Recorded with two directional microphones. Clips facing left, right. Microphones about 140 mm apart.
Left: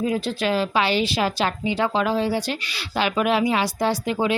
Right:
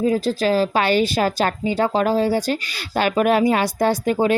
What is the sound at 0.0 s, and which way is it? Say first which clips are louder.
Speech: right 4 dB; 35° right (ahead or behind).